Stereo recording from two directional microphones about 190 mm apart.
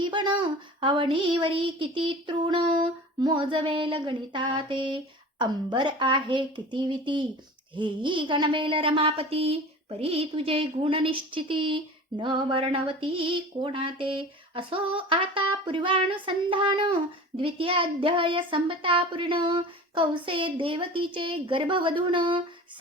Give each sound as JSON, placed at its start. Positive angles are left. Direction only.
{"t": 0.0, "sound": "a woman's voice", "side_deg": -25}